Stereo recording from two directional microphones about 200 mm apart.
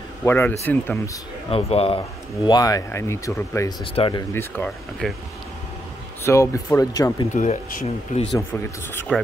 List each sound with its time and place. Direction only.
0.2 s speech: 10° left (ahead or behind)
1.5 s speech: 30° left (ahead or behind)
3.8 s speech: 25° left (ahead or behind)
4.3 s speech: 10° left (ahead or behind)
6.2 s speech: 15° left (ahead or behind)
7.3 s speech: 40° left (ahead or behind)
9.1 s speech: 5° left (ahead or behind)